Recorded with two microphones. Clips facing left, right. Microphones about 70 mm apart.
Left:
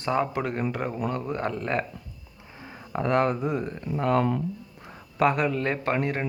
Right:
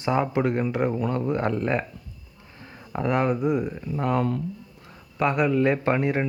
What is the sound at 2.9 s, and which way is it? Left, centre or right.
Speech, centre.